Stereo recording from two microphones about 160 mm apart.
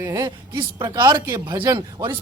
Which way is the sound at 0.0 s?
25° right (ahead or behind).